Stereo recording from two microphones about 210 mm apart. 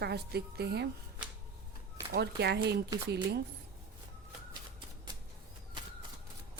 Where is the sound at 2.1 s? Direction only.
50° right (ahead or behind).